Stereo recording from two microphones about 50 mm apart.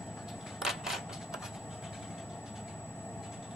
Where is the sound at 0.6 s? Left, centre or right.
Centre.